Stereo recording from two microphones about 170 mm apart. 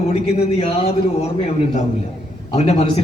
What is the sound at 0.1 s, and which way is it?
Speech, 40° left (ahead or behind).